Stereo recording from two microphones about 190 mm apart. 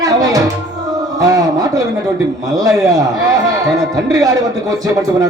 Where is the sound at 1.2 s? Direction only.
20° right (ahead or behind).